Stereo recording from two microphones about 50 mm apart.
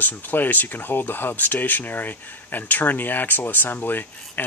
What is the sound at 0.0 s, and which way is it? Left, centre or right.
Speech, left.